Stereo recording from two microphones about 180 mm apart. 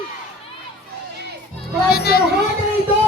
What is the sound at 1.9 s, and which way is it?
Speech, 60° left (ahead or behind).